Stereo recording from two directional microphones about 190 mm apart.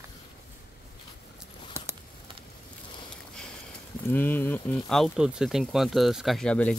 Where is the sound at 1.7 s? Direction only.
15° right (ahead or behind).